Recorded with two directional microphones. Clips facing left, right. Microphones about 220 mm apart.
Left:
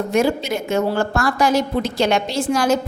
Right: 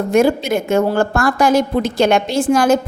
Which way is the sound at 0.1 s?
50° right (ahead or behind).